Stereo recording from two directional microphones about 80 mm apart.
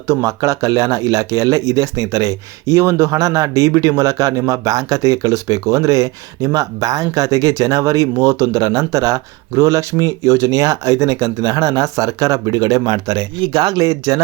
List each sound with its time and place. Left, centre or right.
0.1 s speech: right